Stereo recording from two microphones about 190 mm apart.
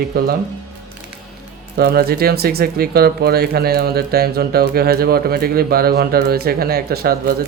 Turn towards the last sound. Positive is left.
turn(degrees=-55)  # may be behind; listen again after turning